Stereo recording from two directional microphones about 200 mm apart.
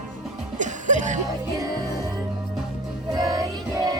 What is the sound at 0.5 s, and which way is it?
Music, 40° right (ahead or behind).